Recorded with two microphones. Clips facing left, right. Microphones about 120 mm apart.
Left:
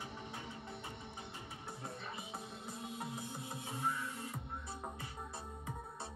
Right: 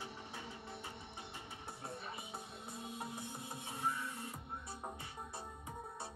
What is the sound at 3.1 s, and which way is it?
Music, 30° right (ahead or behind).